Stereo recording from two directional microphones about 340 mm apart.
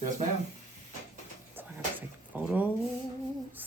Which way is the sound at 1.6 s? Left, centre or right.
Centre.